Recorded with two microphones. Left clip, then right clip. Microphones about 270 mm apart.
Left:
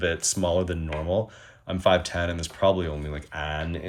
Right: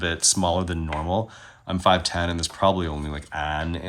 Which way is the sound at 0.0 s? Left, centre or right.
Centre.